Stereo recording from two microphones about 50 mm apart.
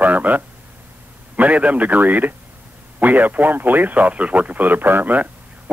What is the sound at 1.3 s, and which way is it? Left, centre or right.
Speech, right.